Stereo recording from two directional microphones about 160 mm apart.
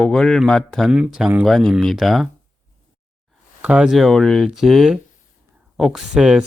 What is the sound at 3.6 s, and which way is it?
Speech, 5° right (ahead or behind).